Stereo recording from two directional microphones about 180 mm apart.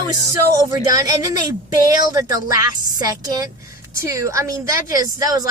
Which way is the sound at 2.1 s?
20° right (ahead or behind).